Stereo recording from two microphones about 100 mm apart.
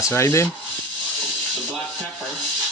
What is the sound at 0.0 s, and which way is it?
Speech, 25° left (ahead or behind).